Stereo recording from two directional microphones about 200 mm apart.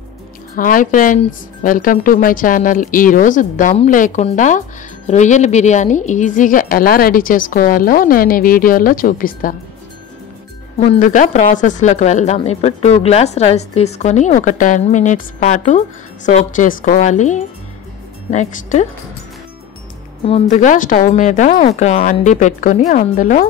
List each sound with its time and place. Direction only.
0.6 s speech: 45° left (ahead or behind)
10.8 s speech: 35° left (ahead or behind)
20.2 s speech: 35° left (ahead or behind)